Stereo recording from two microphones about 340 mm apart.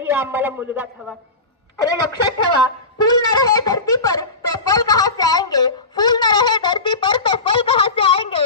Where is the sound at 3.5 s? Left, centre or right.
Centre.